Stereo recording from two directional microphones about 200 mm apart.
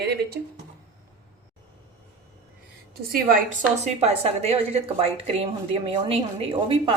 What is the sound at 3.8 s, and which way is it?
A woman's voice, 35° right (ahead or behind).